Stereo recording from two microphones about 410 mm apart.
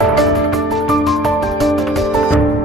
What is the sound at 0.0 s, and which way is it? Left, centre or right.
Music, centre.